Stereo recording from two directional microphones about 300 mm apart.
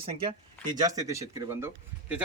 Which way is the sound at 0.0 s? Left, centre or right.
Centre.